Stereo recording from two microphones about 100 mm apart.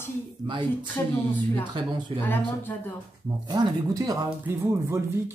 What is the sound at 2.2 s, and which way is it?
Speech, 20° left (ahead or behind).